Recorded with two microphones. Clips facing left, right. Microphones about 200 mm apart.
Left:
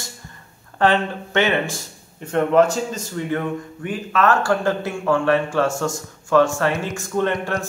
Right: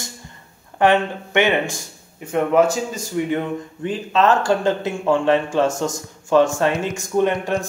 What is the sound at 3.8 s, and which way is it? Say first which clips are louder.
A man's voice: right 2 dB; 25° right (ahead or behind).